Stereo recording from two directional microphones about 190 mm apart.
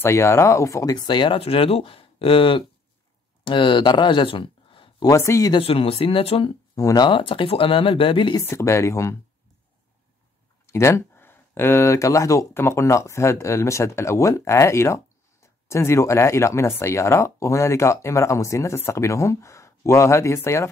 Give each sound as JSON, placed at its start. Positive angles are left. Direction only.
{"t": 0.0, "sound": "speech", "side_deg": 15}
{"t": 5.1, "sound": "speech", "side_deg": 15}
{"t": 5.6, "sound": "speech", "side_deg": 30}
{"t": 6.7, "sound": "speech", "side_deg": 20}
{"t": 8.5, "sound": "speech", "side_deg": 15}
{"t": 10.7, "sound": "speech", "side_deg": 15}